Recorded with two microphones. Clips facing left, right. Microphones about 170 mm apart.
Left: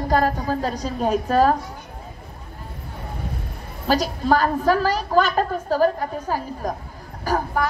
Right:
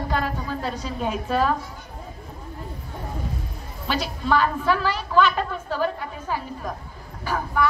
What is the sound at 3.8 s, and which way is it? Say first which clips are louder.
A woman's voice: left 5 dB; 40° left (ahead or behind).